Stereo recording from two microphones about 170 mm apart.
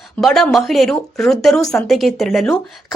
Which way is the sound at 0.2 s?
Centre (ahead or behind).